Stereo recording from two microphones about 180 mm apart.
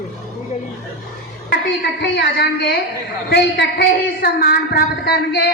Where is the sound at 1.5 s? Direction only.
65° left (ahead or behind).